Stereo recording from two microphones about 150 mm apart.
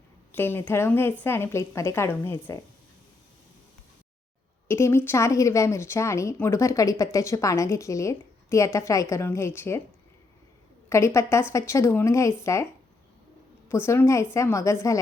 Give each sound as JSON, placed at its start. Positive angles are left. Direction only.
{"t": 0.3, "sound": "a woman's voice", "side_deg": 15}
{"t": 4.7, "sound": "speech", "side_deg": 15}
{"t": 10.8, "sound": "speech", "side_deg": 20}
{"t": 13.7, "sound": "speech", "side_deg": 15}